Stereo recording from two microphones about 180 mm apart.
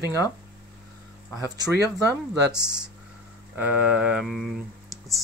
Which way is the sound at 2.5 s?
5° right (ahead or behind).